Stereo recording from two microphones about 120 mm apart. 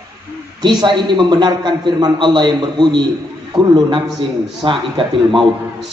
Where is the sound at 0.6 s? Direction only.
35° right (ahead or behind).